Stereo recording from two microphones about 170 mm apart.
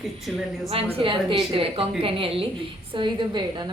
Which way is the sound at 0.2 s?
Centre (ahead or behind).